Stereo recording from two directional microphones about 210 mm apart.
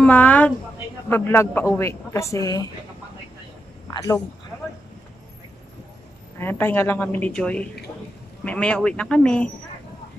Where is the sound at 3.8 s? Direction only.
15° left (ahead or behind).